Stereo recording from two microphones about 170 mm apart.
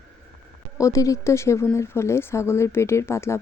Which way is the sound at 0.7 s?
20° left (ahead or behind).